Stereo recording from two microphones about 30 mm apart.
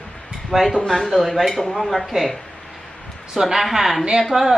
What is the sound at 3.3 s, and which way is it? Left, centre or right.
Speech, centre.